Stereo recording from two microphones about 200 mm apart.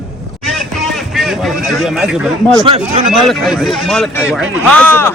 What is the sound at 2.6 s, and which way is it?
Speech, 30° right (ahead or behind).